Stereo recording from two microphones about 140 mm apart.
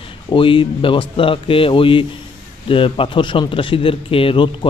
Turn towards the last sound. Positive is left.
turn(degrees=35)  # may be behind; listen again after turning